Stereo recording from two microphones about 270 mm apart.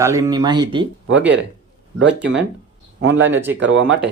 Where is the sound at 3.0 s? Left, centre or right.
Right.